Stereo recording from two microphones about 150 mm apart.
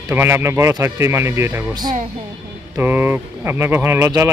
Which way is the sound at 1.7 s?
25° right (ahead or behind).